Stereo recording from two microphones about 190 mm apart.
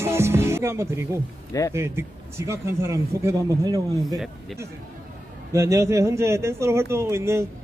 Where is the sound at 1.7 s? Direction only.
15° right (ahead or behind).